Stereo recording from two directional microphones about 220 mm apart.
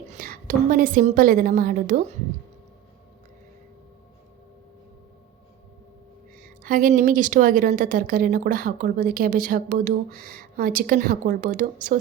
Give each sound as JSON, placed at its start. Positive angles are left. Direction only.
{"t": 0.2, "sound": "a woman's voice", "side_deg": -40}
{"t": 6.4, "sound": "a woman's voice", "side_deg": -40}